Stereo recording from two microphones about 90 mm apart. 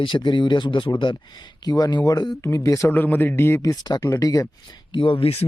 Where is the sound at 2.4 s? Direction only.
35° left (ahead or behind).